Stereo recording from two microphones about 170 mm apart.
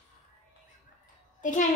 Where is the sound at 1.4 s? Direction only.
50° left (ahead or behind).